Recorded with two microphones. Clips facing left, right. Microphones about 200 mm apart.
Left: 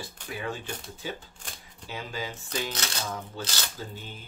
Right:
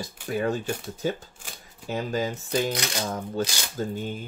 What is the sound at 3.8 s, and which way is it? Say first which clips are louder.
Speech: right 11 dB; 45° right (ahead or behind).